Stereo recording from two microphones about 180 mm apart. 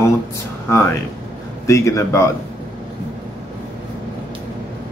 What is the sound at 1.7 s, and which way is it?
Speech, 15° left (ahead or behind).